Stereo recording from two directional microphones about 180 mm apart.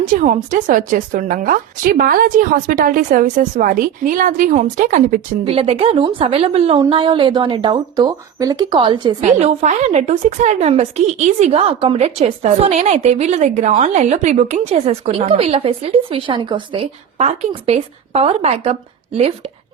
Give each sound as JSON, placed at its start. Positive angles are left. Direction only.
{"t": 0.2, "sound": "a woman's voice", "side_deg": -45}
{"t": 5.5, "sound": "a woman's voice", "side_deg": -35}
{"t": 9.2, "sound": "a woman's voice", "side_deg": -35}